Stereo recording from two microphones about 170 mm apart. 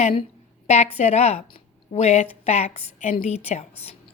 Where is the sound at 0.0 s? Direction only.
30° left (ahead or behind).